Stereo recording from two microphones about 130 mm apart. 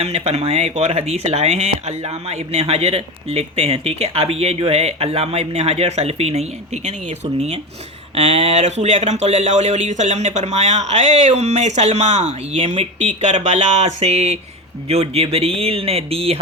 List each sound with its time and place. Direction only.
0.0 s speech: 55° right (ahead or behind)
8.1 s speech: 55° right (ahead or behind)